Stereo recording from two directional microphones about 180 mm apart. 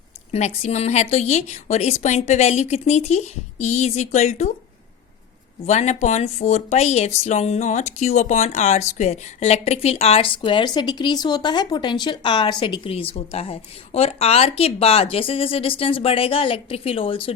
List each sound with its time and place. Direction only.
0.3 s speech: 35° left (ahead or behind)
5.6 s speech: 40° left (ahead or behind)